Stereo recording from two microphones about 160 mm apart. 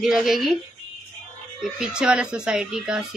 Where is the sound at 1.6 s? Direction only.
5° right (ahead or behind).